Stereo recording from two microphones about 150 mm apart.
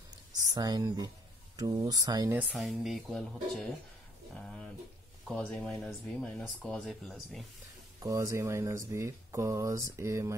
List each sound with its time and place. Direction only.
0.3 s speech: 25° right (ahead or behind)
2.5 s speech: centre (ahead or behind)
4.4 s a sound: 5° left (ahead or behind)
5.3 s speech: 5° left (ahead or behind)
8.0 s speech: 20° right (ahead or behind)